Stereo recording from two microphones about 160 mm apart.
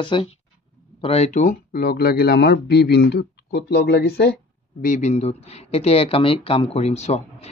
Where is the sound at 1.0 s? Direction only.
45° left (ahead or behind); by 4.3 s 90° left.